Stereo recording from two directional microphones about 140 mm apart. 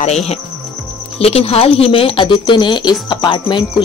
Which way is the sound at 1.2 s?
45° left (ahead or behind).